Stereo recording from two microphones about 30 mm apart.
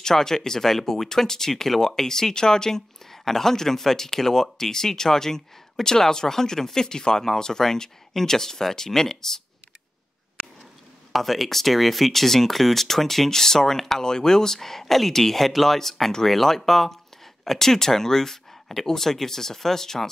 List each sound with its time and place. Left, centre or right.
0.0 s speech: centre
11.1 s speech: centre